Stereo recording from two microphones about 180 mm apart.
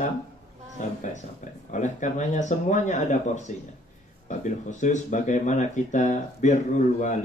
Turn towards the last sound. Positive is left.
turn(degrees=45)  # may be behind; listen again after turning